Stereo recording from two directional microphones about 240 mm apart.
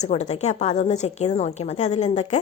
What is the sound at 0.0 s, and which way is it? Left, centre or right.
Speech, left.